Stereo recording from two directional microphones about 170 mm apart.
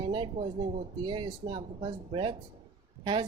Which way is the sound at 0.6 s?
25° right (ahead or behind).